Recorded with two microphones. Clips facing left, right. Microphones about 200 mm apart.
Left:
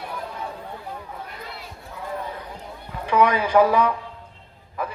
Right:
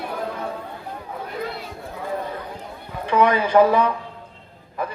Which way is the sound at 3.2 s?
10° left (ahead or behind).